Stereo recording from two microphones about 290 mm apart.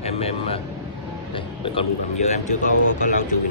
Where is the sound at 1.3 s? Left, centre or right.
Centre.